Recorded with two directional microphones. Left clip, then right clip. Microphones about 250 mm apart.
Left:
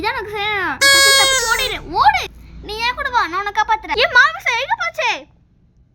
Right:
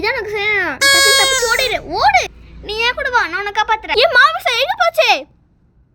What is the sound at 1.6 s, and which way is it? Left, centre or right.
A child's voice, centre.